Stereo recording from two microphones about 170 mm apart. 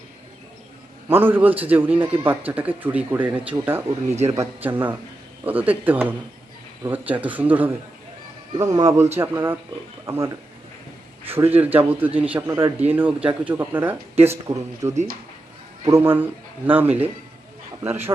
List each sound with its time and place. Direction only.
1.0 s a man's voice: 10° right (ahead or behind)
3.8 s speech: 40° right (ahead or behind)
4.3 s a man's voice: 15° right (ahead or behind)
8.5 s a man's voice: 20° right (ahead or behind)